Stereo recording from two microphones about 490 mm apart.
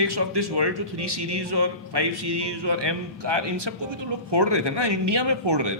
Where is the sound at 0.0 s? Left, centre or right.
Right.